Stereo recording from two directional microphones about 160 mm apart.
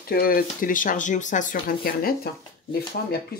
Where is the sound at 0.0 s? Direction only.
65° left (ahead or behind).